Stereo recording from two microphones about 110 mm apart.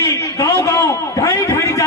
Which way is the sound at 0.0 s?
30° left (ahead or behind).